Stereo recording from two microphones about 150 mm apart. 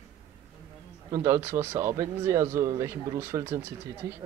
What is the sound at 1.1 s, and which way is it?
Speech, 20° right (ahead or behind).